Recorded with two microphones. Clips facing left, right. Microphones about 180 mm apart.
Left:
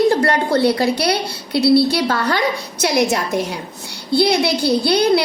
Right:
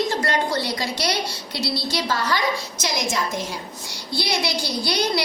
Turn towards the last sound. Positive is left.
turn(degrees=60)  # may be behind; listen again after turning